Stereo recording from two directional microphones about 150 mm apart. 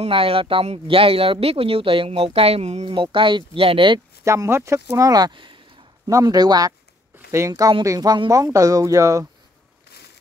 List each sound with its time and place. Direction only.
0.0 s speech: 40° right (ahead or behind)
2.8 s speech: 35° right (ahead or behind)
4.2 s speech: 20° right (ahead or behind)